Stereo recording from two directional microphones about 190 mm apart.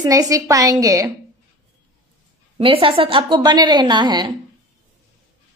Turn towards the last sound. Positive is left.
turn(degrees=-25)  # may be behind; listen again after turning